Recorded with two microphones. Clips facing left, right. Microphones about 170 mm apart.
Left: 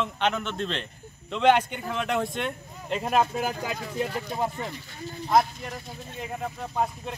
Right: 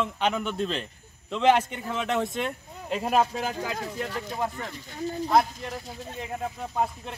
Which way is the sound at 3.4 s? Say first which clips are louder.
Left 1 dB; 15° left (ahead or behind).